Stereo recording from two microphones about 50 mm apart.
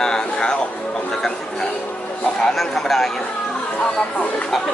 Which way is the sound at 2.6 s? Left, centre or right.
Centre.